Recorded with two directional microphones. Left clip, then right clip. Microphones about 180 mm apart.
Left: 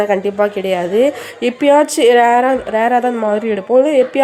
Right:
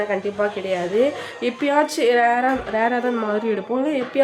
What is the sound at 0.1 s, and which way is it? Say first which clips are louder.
A woman's voice: left 7 dB; 35° left (ahead or behind).